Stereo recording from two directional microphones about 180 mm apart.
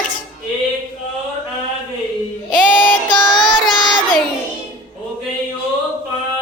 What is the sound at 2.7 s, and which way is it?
Child singing, 10° left (ahead or behind).